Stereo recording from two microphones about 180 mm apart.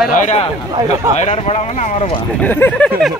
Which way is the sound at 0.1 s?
40° left (ahead or behind).